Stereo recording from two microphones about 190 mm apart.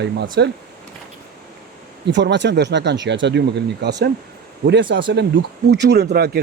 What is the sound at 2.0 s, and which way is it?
Speech, 65° right (ahead or behind).